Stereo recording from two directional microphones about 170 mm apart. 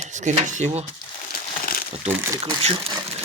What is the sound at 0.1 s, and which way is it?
Speech, 45° right (ahead or behind).